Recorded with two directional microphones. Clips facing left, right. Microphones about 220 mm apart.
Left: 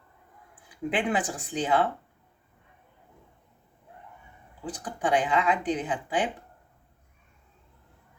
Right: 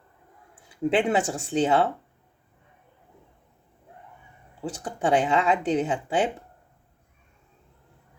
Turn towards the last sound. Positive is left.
turn(degrees=-25)  # may be behind; listen again after turning